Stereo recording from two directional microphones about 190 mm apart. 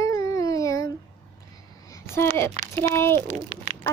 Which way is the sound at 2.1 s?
15° left (ahead or behind).